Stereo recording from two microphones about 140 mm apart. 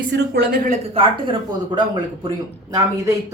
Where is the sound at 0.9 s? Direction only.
35° right (ahead or behind).